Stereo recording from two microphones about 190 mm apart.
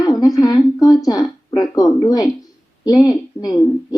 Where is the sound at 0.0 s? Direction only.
20° left (ahead or behind).